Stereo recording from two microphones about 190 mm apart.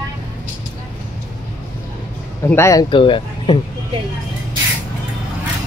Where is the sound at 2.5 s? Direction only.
15° left (ahead or behind).